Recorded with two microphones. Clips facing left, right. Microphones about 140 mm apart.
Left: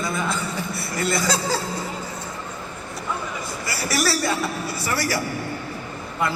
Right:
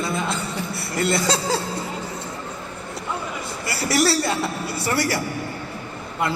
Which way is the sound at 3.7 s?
25° right (ahead or behind).